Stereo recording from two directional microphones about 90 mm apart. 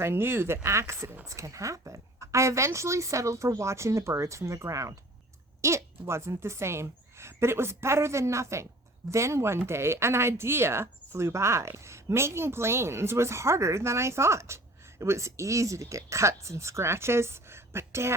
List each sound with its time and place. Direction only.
0.0 s a woman's voice: 25° right (ahead or behind)